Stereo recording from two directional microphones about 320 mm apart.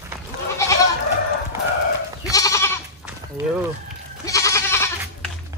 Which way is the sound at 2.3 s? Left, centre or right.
Centre.